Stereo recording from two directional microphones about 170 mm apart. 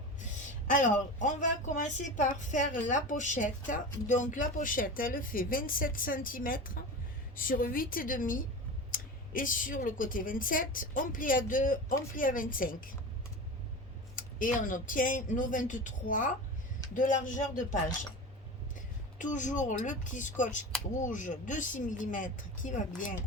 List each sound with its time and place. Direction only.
0.7 s a woman's voice: 50° left (ahead or behind)
14.2 s speech: 50° left (ahead or behind)
19.2 s speech: 45° left (ahead or behind)